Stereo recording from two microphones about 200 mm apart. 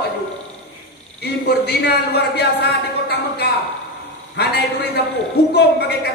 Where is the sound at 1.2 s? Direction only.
55° left (ahead or behind).